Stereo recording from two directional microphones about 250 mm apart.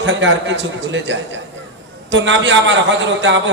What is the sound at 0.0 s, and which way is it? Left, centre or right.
A man's voice, right.